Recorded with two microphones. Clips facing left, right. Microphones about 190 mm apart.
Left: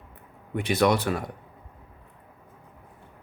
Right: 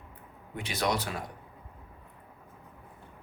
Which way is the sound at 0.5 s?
55° left (ahead or behind).